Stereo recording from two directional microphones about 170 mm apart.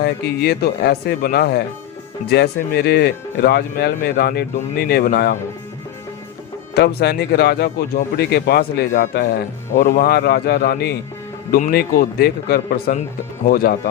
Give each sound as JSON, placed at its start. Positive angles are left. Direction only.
{"t": 0.0, "sound": "speech", "side_deg": 70}
{"t": 6.7, "sound": "a man's voice", "side_deg": 70}